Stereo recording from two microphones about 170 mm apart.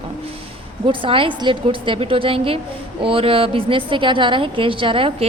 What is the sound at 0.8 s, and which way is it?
A woman's voice, 30° right (ahead or behind).